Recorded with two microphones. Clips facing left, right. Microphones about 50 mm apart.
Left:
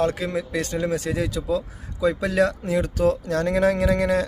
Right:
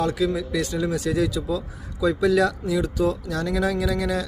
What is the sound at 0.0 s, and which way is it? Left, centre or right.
Speech, left.